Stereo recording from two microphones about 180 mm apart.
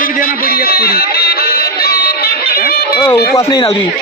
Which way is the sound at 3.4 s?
25° left (ahead or behind).